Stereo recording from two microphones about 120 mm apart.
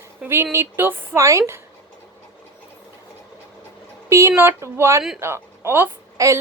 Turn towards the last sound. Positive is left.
turn(degrees=-25)  # may be behind; listen again after turning